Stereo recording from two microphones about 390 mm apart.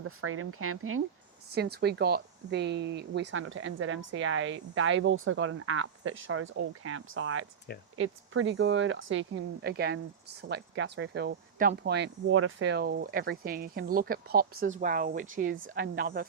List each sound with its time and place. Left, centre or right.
0.0 s speech: right